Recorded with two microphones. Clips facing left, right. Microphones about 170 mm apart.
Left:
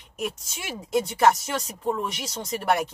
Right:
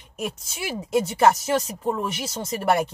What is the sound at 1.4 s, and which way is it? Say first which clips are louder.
Speech: right 4 dB; 30° right (ahead or behind).